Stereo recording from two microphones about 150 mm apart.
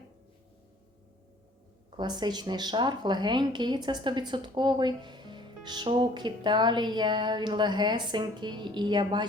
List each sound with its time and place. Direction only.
2.0 s speech: 30° right (ahead or behind)